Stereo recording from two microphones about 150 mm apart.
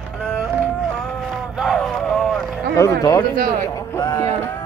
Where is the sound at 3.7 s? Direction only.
20° left (ahead or behind).